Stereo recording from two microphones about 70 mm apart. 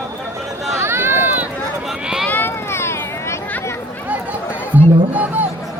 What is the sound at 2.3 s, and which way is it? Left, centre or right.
Vehicle, left.